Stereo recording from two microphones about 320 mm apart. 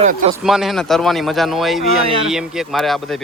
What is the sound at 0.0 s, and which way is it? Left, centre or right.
Speech, right.